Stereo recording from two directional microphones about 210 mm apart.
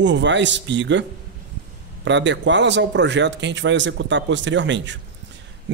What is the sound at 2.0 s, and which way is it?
A man's voice, 60° right (ahead or behind).